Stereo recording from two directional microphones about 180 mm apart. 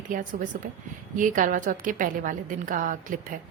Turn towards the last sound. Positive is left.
turn(degrees=-50)  # may be behind; listen again after turning